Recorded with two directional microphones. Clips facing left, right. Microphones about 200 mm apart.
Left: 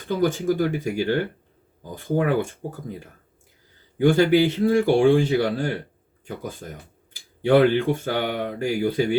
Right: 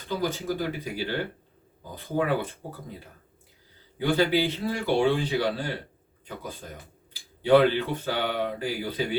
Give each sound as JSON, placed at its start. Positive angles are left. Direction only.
{"t": 0.2, "sound": "speech", "side_deg": 50}
{"t": 3.9, "sound": "speech", "side_deg": 50}